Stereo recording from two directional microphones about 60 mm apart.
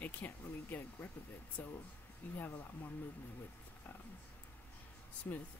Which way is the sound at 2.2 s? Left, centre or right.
Left.